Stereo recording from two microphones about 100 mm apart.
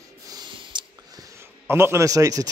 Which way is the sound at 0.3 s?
45° right (ahead or behind).